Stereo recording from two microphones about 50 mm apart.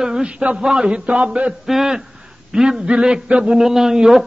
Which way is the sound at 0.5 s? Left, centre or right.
Centre.